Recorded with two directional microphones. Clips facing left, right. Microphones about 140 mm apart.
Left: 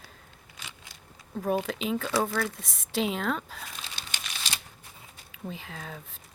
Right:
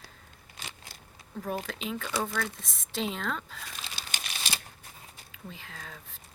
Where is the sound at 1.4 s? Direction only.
15° left (ahead or behind).